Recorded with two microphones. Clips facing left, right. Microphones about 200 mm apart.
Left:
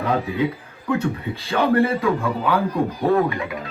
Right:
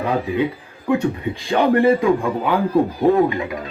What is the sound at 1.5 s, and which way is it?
Speech, 15° right (ahead or behind).